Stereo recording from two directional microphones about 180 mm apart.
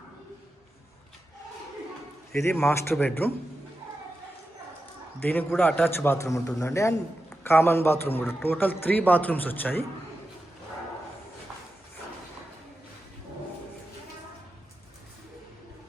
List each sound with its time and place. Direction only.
2.3 s speech: 15° left (ahead or behind)
2.6 s speech: 5° left (ahead or behind)
5.2 s speech: 10° left (ahead or behind)